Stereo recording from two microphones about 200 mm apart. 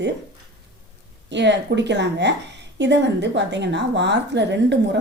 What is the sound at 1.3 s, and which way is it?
A woman's voice, 60° right (ahead or behind).